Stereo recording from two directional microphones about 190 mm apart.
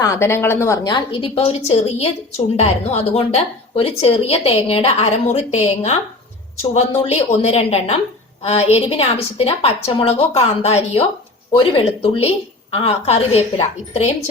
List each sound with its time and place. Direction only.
0.0 s a woman's voice: 15° left (ahead or behind); by 14.1 s 35° left (ahead or behind)